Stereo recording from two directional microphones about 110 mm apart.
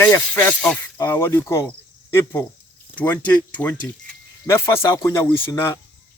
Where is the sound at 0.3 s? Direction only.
20° left (ahead or behind).